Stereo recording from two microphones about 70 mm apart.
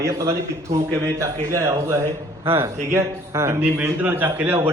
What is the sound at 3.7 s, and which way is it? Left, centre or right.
Speech, right.